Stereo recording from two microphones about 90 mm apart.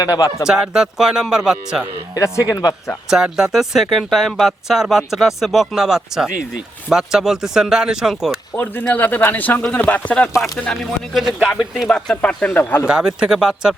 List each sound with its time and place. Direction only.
0.0 s speech: 40° left (ahead or behind)
0.4 s a man's voice: 5° right (ahead or behind)
2.1 s speech: 35° left (ahead or behind)
3.3 s speech: 5° right (ahead or behind)
8.5 s a man's voice: 20° left (ahead or behind)
10.7 s speech: centre (ahead or behind)
11.9 s a man's voice: 10° left (ahead or behind)
12.9 s a man's voice: 10° right (ahead or behind)